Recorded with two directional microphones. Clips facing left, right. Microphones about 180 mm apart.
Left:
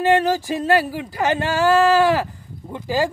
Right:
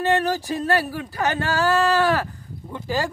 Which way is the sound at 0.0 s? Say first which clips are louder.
Left 4 dB; 15° left (ahead or behind).